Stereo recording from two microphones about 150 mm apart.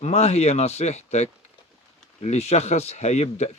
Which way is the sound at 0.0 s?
45° left (ahead or behind).